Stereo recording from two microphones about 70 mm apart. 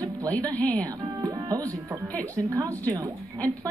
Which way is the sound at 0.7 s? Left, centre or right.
Right.